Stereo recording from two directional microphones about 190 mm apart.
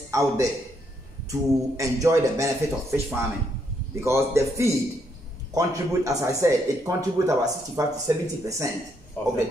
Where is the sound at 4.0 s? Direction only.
15° right (ahead or behind).